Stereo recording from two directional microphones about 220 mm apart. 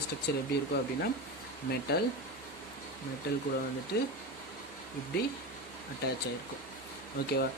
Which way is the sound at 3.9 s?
50° left (ahead or behind).